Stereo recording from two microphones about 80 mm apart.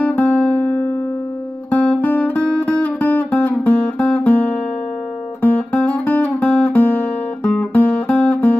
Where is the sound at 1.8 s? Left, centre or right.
Left.